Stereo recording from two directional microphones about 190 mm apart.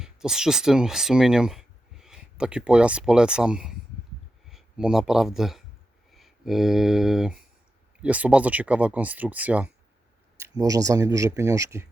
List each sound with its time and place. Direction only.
0.0 s speech: 5° right (ahead or behind)